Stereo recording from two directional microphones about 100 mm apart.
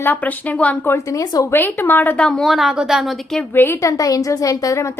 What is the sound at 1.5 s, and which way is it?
Speech, 20° left (ahead or behind).